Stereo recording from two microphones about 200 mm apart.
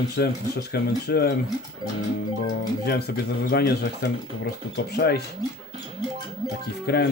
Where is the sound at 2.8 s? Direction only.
55° left (ahead or behind).